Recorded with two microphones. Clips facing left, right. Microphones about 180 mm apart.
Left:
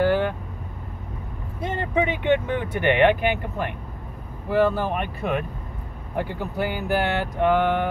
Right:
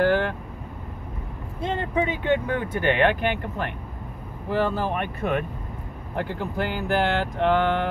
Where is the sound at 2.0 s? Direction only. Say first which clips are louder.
Left 2 dB; 20° left (ahead or behind).